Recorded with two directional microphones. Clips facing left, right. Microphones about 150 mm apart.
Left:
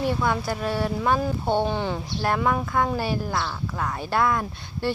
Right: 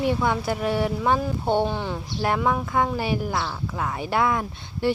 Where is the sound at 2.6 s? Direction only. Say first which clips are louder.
Even; 20° right (ahead or behind).